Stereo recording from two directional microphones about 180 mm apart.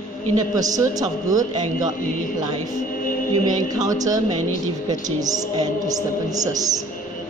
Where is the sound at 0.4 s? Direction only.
20° right (ahead or behind).